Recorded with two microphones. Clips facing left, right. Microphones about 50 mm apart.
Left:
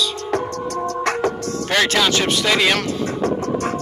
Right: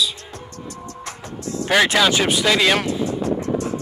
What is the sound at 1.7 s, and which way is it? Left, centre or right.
Speech, centre.